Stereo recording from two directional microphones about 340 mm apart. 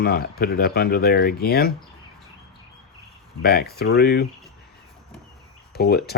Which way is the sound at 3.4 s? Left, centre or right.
Left.